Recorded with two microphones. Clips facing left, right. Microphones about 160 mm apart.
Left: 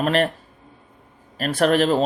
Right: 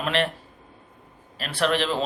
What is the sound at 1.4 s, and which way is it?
Speech, 45° left (ahead or behind).